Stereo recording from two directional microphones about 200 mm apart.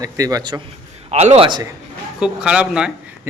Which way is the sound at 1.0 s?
35° right (ahead or behind).